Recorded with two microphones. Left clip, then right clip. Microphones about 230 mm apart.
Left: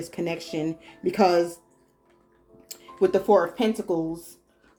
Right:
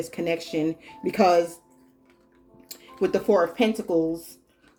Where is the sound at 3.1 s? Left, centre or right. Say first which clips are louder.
Even; centre.